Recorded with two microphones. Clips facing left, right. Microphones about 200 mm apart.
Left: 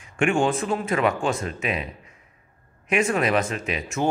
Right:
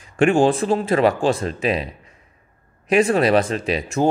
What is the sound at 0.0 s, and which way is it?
A man's voice, 35° right (ahead or behind).